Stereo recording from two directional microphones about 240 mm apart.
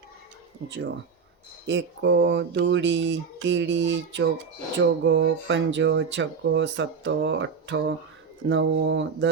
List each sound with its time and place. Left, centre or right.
0.7 s speech: right